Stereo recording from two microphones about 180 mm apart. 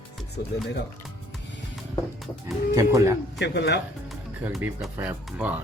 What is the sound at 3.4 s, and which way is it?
Speech, 70° left (ahead or behind).